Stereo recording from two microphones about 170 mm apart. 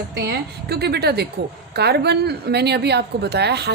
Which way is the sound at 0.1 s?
75° right (ahead or behind).